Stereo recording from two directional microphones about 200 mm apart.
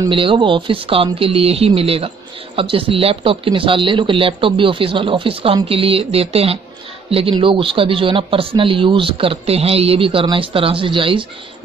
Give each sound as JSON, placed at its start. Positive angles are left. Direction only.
{"t": 0.0, "sound": "speech", "side_deg": -25}